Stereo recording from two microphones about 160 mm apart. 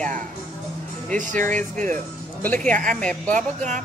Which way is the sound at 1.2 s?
55° right (ahead or behind).